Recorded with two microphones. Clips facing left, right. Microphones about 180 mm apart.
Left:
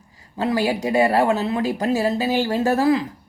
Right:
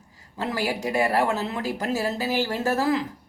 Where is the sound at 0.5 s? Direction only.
15° left (ahead or behind).